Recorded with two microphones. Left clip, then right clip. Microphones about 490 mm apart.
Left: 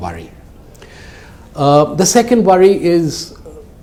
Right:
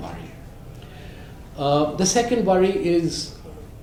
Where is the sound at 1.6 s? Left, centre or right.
Left.